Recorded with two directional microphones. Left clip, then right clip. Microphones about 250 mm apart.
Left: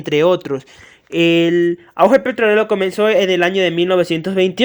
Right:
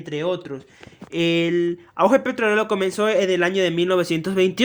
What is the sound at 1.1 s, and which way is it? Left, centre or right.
Speech, centre.